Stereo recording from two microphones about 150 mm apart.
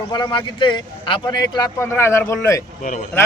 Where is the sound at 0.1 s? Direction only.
30° left (ahead or behind).